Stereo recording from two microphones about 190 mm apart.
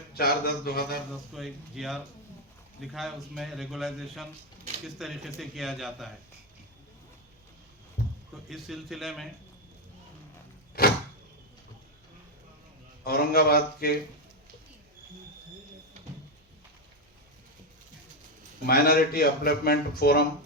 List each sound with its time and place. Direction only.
0.1 s a man's voice: 55° left (ahead or behind)
1.4 s a man's voice: centre (ahead or behind)
8.4 s a man's voice: centre (ahead or behind)
13.1 s a man's voice: 55° left (ahead or behind)
18.6 s a man's voice: 50° left (ahead or behind)